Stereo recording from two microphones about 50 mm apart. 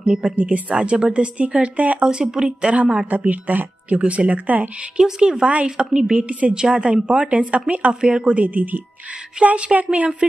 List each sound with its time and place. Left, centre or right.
0.4 s speech: right
2.0 s speech: centre
2.7 s speech: right
4.9 s speech: centre
8.4 s speech: right